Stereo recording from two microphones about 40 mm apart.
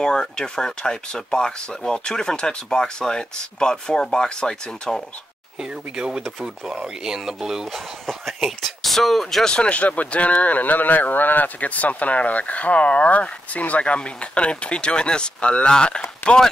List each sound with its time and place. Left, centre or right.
0.0 s speech: centre
5.6 s speech: centre
8.9 s speech: centre
9.7 s speech: left